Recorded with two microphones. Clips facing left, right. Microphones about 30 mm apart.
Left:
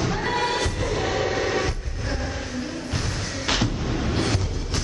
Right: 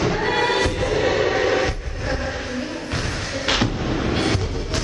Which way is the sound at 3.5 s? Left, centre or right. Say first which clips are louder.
Right 3 dB; right.